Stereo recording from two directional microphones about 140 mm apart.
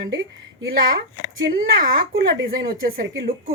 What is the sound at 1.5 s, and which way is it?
Speech, 90° right.